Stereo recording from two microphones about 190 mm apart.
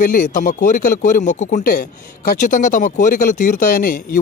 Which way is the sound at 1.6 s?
50° left (ahead or behind).